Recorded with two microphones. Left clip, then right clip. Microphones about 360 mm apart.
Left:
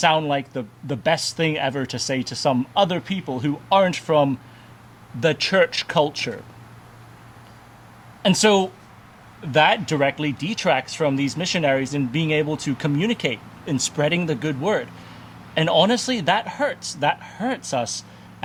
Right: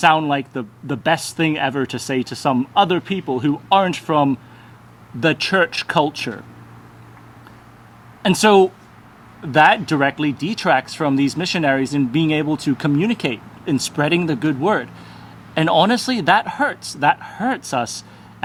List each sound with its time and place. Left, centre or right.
0.0 s a man's voice: left
8.2 s a man's voice: centre